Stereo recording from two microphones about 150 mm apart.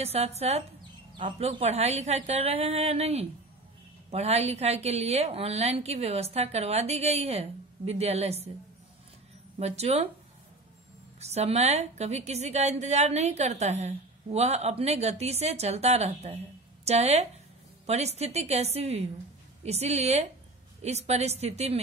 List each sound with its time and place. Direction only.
0.0 s a woman's voice: 45° right (ahead or behind)
9.6 s a woman's voice: 45° right (ahead or behind)
11.1 s a woman's voice: 45° right (ahead or behind)